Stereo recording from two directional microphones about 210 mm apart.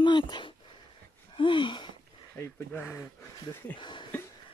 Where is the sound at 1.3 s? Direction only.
25° left (ahead or behind).